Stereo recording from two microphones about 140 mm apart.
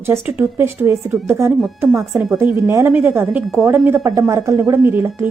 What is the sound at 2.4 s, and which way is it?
Speech, 15° right (ahead or behind).